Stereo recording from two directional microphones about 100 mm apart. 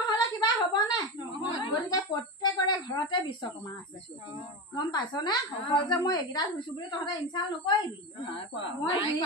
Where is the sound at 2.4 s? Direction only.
50° left (ahead or behind).